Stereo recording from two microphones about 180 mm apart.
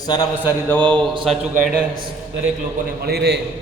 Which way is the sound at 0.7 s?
5° left (ahead or behind).